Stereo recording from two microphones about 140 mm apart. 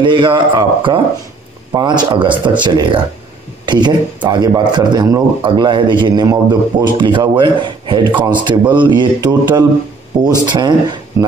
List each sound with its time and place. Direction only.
0.0 s a man's voice: 35° right (ahead or behind)